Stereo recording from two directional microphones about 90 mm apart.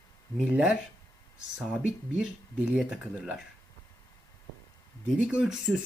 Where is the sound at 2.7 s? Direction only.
10° right (ahead or behind).